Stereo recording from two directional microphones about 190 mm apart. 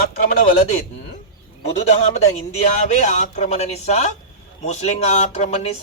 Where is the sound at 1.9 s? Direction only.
35° left (ahead or behind).